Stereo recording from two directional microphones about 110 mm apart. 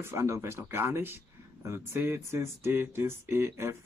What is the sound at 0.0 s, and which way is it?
Speech, 25° right (ahead or behind).